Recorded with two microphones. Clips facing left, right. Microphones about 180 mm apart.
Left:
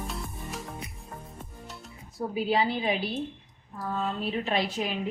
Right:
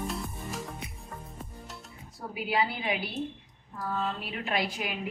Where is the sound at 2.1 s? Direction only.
30° left (ahead or behind).